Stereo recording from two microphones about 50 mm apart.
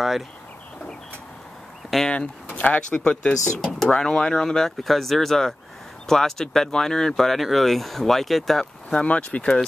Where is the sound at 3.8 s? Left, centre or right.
Centre.